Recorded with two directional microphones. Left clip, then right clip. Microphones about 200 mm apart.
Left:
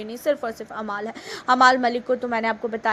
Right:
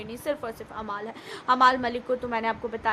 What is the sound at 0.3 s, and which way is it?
A woman's voice, 20° left (ahead or behind).